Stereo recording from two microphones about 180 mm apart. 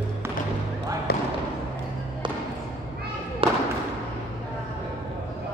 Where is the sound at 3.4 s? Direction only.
30° right (ahead or behind).